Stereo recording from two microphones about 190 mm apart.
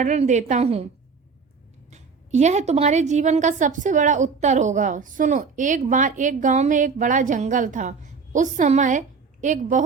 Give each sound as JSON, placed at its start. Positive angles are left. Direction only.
{"t": 0.0, "sound": "a woman's voice", "side_deg": -40}
{"t": 1.9, "sound": "a woman's voice", "side_deg": -35}